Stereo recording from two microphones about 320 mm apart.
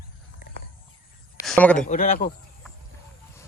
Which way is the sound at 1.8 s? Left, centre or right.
Left.